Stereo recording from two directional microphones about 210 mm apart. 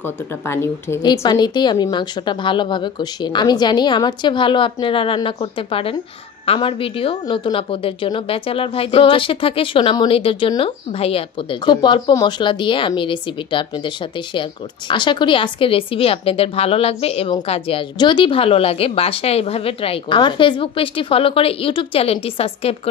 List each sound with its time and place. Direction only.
0.0 s speech: 10° left (ahead or behind); by 22.8 s 30° left (ahead or behind)